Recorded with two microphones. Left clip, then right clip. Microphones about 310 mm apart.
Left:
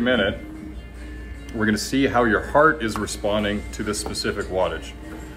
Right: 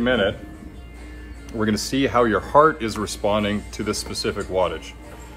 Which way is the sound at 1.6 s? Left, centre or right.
Right.